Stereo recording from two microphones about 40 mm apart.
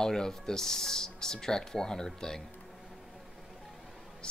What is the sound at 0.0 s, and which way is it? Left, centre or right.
Speech, centre.